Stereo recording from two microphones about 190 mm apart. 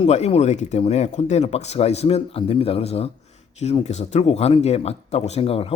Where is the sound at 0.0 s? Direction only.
30° left (ahead or behind).